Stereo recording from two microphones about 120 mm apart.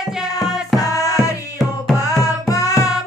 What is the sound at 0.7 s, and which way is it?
Music, 30° left (ahead or behind).